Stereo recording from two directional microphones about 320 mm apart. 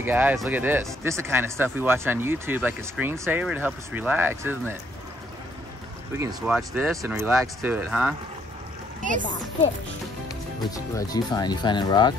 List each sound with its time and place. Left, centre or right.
0.0 s speech: centre
6.1 s speech: centre
10.7 s speech: centre